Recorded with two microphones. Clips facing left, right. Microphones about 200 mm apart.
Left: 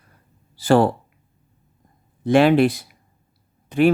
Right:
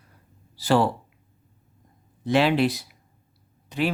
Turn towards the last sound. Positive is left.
turn(degrees=50)  # may be behind; listen again after turning